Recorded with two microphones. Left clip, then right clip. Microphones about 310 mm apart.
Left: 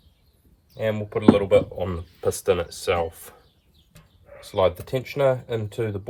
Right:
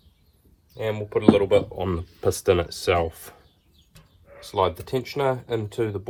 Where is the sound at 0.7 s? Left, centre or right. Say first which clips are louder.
Even; centre; by 3.4 s right.